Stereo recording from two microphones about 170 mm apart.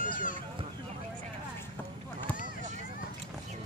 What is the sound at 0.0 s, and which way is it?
Run, 50° left (ahead or behind).